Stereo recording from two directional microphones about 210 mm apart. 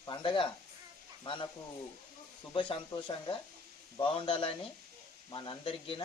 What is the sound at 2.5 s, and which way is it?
Speech, 25° left (ahead or behind).